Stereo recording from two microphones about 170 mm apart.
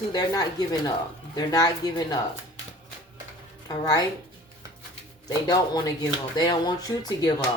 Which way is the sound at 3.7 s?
20° left (ahead or behind).